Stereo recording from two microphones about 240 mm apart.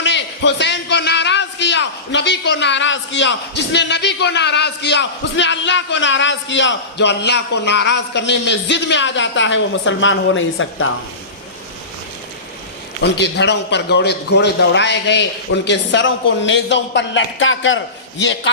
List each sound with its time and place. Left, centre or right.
0.0 s a sound: left
3.7 s speech: left
13.0 s speech: left